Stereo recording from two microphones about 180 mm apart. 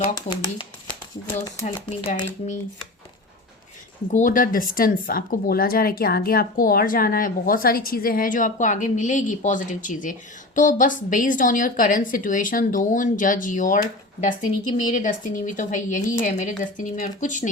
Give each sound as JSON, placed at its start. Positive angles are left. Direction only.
{"t": 0.1, "sound": "speech", "side_deg": 25}
{"t": 1.6, "sound": "speech", "side_deg": 35}
{"t": 4.1, "sound": "speech", "side_deg": 45}